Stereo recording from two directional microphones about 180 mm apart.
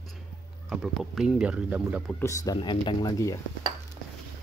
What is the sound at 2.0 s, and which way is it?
Speech, 15° left (ahead or behind).